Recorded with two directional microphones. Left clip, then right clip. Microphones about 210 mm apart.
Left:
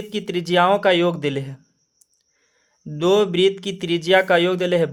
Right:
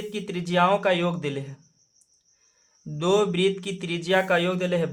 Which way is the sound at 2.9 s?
30° left (ahead or behind).